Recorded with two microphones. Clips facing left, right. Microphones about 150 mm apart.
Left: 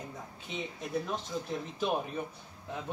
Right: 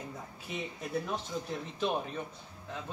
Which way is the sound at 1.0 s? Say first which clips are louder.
Even; centre (ahead or behind).